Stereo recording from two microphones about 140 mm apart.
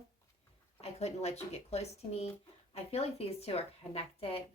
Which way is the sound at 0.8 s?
50° left (ahead or behind).